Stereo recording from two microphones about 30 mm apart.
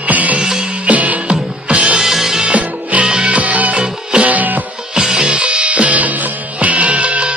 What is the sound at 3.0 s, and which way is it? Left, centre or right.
Music, right.